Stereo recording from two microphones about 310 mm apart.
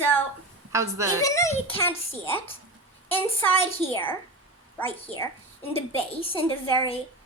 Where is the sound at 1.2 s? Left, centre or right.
Centre.